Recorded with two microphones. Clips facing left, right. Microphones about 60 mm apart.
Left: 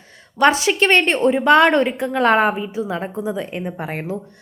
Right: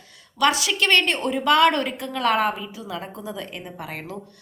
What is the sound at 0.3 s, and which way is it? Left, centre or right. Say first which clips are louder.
A woman's voice: left 6 dB; left.